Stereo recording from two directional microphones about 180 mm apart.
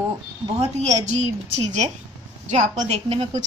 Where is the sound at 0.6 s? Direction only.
40° right (ahead or behind).